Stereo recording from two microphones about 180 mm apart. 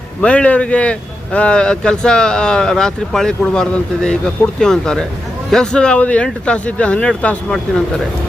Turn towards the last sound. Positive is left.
turn(degrees=5)  # may be behind; listen again after turning